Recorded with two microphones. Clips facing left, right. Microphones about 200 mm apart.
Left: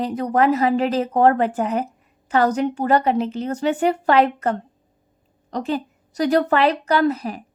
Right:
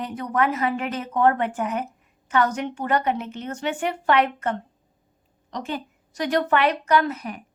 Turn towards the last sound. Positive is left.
turn(degrees=35)  # may be behind; listen again after turning